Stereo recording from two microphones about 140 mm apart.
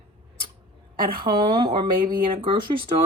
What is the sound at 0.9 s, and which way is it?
Speech, 90° right.